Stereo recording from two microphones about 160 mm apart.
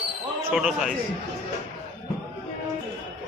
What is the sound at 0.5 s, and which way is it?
Speech, 5° right (ahead or behind).